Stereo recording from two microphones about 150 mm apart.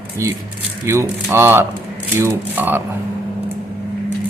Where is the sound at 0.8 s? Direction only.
15° right (ahead or behind).